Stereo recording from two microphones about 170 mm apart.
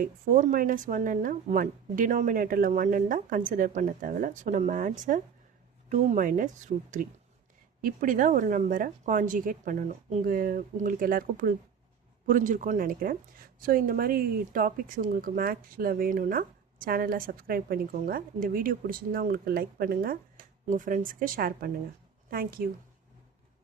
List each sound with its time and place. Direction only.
0.0 s speech: 50° right (ahead or behind)